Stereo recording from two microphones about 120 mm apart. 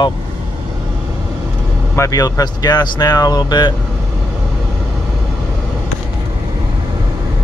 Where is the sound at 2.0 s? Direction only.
30° left (ahead or behind).